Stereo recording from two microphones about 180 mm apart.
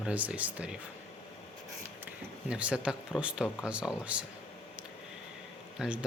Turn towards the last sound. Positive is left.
turn(degrees=-5)  # may be behind; listen again after turning